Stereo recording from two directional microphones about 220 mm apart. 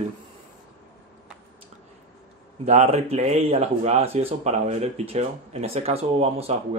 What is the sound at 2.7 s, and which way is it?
Speech, 30° right (ahead or behind).